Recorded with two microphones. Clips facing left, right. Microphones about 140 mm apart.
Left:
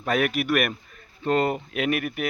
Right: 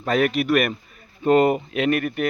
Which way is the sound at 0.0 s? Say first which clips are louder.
Right 3 dB; centre (ahead or behind).